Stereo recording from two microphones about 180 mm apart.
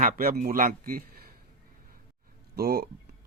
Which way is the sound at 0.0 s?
50° right (ahead or behind).